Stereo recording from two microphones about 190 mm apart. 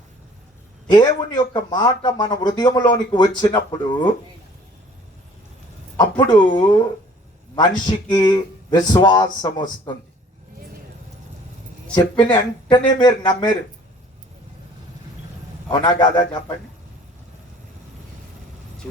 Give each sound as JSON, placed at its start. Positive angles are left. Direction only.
{"t": 1.5, "sound": "speech", "side_deg": 20}
{"t": 6.0, "sound": "speech", "side_deg": 20}
{"t": 11.9, "sound": "speech", "side_deg": 20}
{"t": 15.7, "sound": "speech", "side_deg": 20}